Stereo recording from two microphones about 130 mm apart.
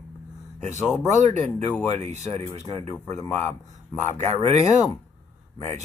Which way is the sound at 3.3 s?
65° right (ahead or behind).